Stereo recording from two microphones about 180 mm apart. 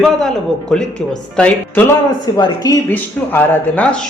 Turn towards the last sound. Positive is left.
turn(degrees=10)  # may be behind; listen again after turning